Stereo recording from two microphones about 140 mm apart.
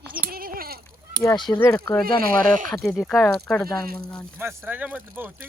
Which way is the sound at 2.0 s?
90° right.